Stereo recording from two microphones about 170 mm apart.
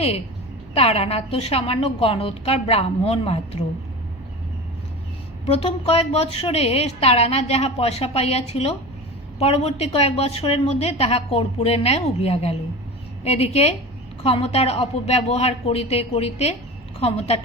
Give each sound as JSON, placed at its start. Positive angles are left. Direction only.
{"t": 0.7, "sound": "a woman's voice", "side_deg": 35}
{"t": 5.5, "sound": "a woman's voice", "side_deg": 35}